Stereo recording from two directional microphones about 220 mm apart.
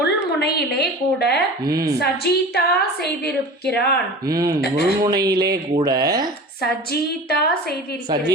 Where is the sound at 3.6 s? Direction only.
45° left (ahead or behind).